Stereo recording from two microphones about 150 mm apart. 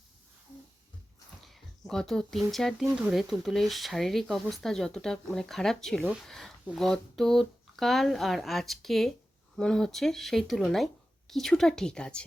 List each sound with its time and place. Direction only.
1.5 s speech: centre (ahead or behind)